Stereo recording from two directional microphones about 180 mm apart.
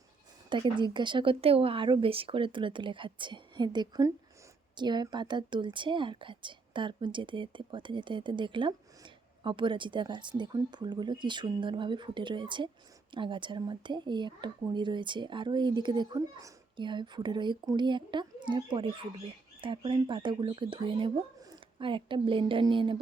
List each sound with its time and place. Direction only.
0.5 s a woman's voice: 25° right (ahead or behind)